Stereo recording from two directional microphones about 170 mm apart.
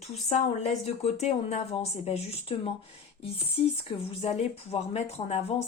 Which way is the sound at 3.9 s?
40° left (ahead or behind).